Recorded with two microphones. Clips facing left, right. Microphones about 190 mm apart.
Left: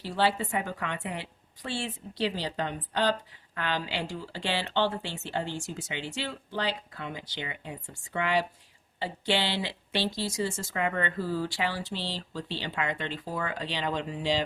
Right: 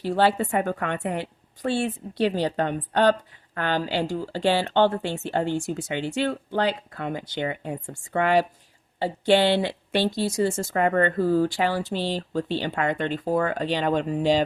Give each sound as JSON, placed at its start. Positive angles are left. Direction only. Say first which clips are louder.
{"t": 0.0, "sound": "a woman's voice", "louder": "right 6 dB", "side_deg": -50}